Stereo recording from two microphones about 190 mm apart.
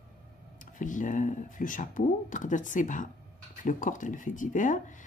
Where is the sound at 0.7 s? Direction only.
40° left (ahead or behind).